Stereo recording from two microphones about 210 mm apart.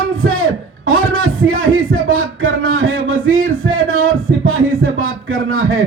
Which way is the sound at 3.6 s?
70° right (ahead or behind).